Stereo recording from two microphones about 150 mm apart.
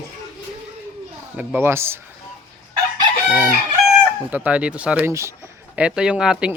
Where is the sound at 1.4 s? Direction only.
15° right (ahead or behind).